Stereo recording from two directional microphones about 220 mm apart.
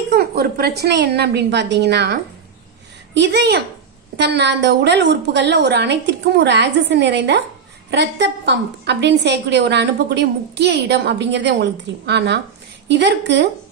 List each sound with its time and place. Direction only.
0.1 s a woman's voice: 45° right (ahead or behind)
3.2 s a woman's voice: 50° right (ahead or behind)